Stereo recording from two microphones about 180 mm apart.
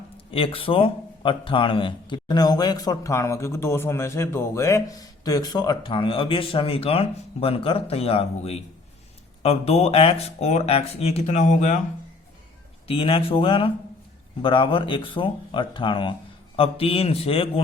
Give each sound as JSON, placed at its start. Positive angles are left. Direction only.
{"t": 0.3, "sound": "a man's voice", "side_deg": 30}
{"t": 12.9, "sound": "a man's voice", "side_deg": 30}